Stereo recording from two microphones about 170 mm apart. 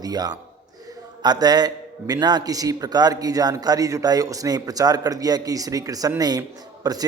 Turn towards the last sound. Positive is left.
turn(degrees=-20)  # may be behind; listen again after turning